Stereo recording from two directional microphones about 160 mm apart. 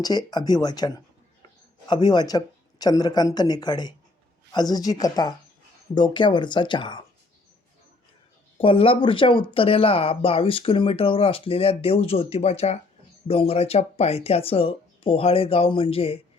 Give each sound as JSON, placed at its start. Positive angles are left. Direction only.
{"t": 0.0, "sound": "speech", "side_deg": 25}
{"t": 8.5, "sound": "speech", "side_deg": 35}